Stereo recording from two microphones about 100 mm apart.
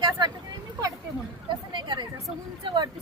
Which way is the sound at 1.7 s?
50° right (ahead or behind).